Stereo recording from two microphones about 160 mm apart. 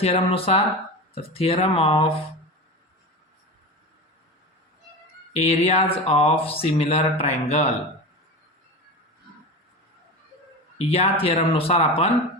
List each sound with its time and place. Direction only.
0.0 s speech: 40° left (ahead or behind)
5.3 s speech: 40° left (ahead or behind)
10.8 s speech: 40° left (ahead or behind)